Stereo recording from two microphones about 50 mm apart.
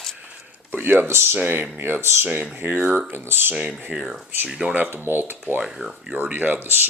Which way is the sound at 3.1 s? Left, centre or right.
Right.